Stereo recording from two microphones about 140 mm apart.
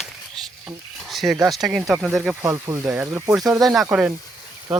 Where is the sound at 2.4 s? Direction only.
20° right (ahead or behind).